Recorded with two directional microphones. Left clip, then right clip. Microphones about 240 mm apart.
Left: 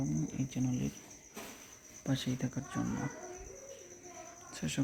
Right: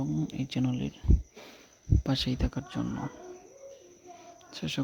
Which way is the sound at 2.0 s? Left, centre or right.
Right.